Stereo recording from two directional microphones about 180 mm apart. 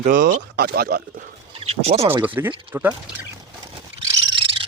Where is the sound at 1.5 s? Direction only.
35° right (ahead or behind).